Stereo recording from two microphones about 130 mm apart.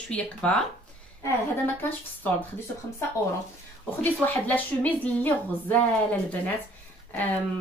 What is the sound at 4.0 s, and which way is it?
A woman's voice, 15° left (ahead or behind).